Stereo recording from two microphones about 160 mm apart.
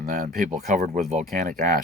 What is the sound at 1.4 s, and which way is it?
Speech, 60° right (ahead or behind).